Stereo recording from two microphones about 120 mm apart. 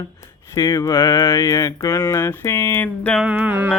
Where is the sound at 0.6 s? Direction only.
30° left (ahead or behind); by 3.2 s 10° left (ahead or behind).